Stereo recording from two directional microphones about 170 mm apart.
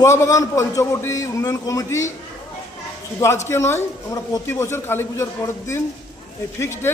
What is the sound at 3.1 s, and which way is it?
A woman's voice, 20° left (ahead or behind).